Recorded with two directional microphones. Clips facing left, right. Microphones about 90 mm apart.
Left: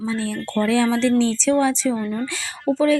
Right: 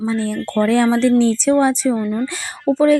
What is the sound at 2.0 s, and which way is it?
Speech, 15° right (ahead or behind).